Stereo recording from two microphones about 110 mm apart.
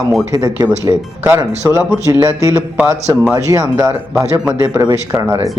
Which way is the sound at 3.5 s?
30° right (ahead or behind).